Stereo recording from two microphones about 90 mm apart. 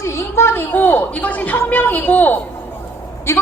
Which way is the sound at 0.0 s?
30° left (ahead or behind).